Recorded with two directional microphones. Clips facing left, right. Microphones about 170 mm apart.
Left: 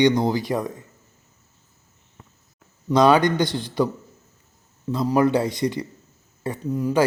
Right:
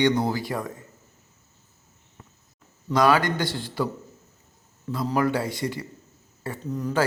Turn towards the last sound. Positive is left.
turn(degrees=10)  # may be behind; listen again after turning